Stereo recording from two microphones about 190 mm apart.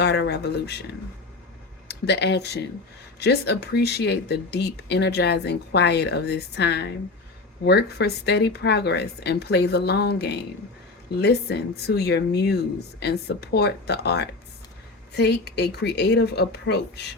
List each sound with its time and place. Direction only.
0.0 s speech: 60° left (ahead or behind)
1.9 s speech: 65° left (ahead or behind)